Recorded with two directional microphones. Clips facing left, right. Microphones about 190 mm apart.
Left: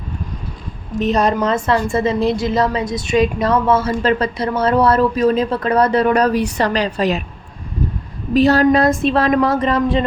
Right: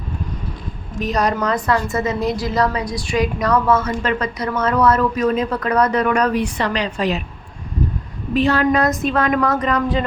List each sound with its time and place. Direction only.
0.9 s a woman's voice: 25° left (ahead or behind)
8.3 s a woman's voice: 40° left (ahead or behind)